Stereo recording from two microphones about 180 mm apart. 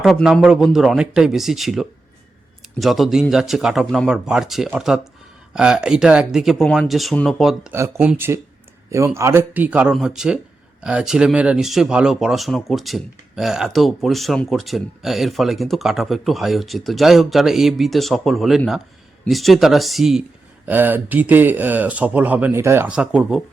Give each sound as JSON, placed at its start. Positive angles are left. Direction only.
{"t": 0.0, "sound": "speech", "side_deg": 0}